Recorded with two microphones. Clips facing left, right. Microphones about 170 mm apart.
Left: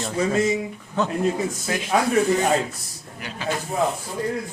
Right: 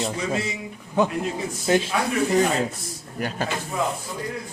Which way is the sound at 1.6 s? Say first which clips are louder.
Right 7 dB; 30° right (ahead or behind).